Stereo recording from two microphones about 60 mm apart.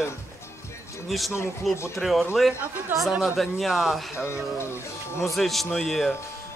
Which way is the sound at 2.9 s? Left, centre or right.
Right.